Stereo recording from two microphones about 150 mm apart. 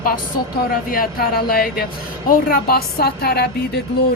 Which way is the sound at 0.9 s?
80° left.